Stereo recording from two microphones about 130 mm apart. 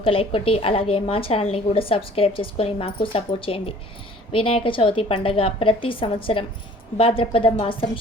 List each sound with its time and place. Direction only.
0.0 s a woman's voice: 45° left (ahead or behind)